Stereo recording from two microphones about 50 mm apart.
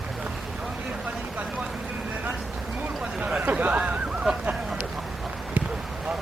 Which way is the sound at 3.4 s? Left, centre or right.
Right.